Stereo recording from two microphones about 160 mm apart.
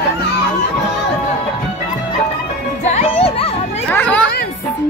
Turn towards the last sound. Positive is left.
turn(degrees=10)  # may be behind; listen again after turning